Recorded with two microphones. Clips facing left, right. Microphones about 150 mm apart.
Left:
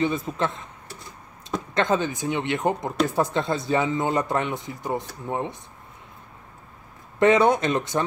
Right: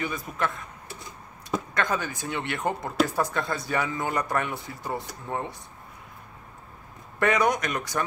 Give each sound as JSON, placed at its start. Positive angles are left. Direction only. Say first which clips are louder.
{"t": 0.0, "sound": "speech", "louder": "left 5 dB", "side_deg": 25}
{"t": 1.7, "sound": "speech", "louder": "left 8 dB", "side_deg": 25}
{"t": 7.2, "sound": "speech", "louder": "left 6 dB", "side_deg": 25}